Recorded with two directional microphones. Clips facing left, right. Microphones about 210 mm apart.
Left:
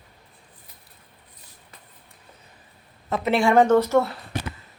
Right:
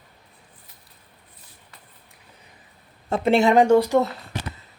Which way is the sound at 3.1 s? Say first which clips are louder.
Right 2 dB; 30° right (ahead or behind).